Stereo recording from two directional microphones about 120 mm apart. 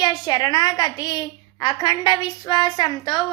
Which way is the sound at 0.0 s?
35° left (ahead or behind).